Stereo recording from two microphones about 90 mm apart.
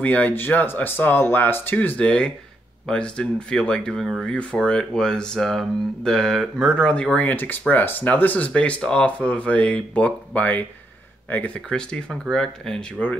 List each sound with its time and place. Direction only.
0.0 s speech: 20° left (ahead or behind)